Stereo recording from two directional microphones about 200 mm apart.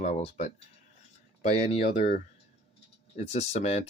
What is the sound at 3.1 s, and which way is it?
Speech, 30° left (ahead or behind).